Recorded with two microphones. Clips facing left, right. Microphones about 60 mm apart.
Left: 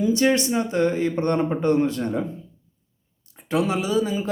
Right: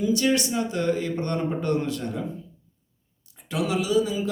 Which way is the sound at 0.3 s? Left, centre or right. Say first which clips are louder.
Left 4 dB; left.